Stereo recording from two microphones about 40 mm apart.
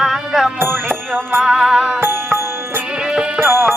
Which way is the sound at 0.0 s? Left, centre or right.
Centre.